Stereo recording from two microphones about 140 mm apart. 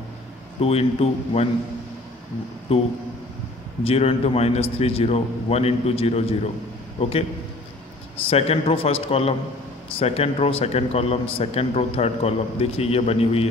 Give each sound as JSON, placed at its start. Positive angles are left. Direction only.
{"t": 0.6, "sound": "a man's voice", "side_deg": 45}
{"t": 2.7, "sound": "a man's voice", "side_deg": 45}
{"t": 8.3, "sound": "a man's voice", "side_deg": 45}